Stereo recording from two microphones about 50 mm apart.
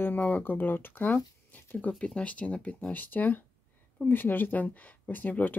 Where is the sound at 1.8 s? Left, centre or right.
Left.